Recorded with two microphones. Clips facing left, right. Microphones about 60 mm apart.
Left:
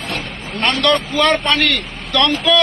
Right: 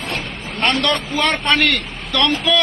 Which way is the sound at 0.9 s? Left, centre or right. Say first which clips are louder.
Left 4 dB; centre.